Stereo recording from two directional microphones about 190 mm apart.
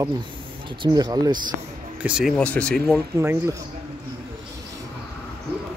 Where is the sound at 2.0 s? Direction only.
5° right (ahead or behind).